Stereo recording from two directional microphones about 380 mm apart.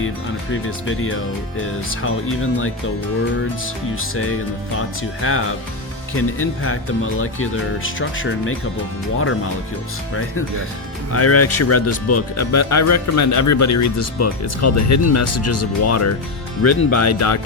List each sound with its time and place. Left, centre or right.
0.5 s speech: left
4.1 s speech: left
11.1 s speech: left